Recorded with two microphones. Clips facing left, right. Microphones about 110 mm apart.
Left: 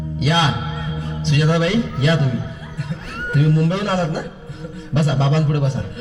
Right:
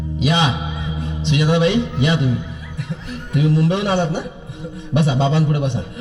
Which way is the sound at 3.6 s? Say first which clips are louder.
Right 2 dB; 25° right (ahead or behind).